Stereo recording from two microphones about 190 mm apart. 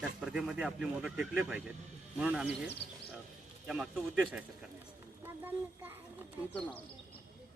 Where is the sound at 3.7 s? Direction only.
5° right (ahead or behind).